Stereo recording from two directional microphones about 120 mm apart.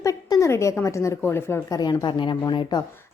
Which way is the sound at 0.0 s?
30° left (ahead or behind).